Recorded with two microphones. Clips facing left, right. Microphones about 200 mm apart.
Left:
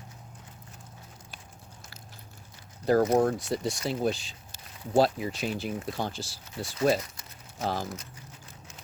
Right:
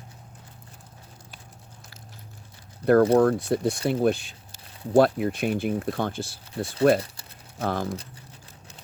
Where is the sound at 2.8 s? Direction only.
60° right (ahead or behind).